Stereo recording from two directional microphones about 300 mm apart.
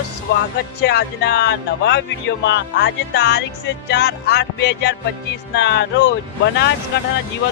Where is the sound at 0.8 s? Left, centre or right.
Left.